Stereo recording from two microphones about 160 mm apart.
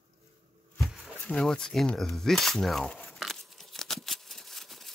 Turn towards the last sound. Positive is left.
turn(degrees=0)  # may be behind; listen again after turning